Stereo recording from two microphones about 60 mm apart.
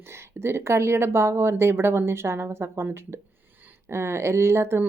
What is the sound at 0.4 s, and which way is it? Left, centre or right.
Speech, right.